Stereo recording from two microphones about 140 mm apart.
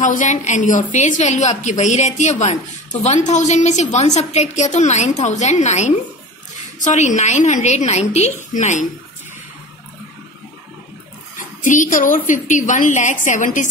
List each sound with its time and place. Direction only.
0.0 s a woman's voice: 65° left (ahead or behind)
11.3 s a woman's voice: 65° left (ahead or behind)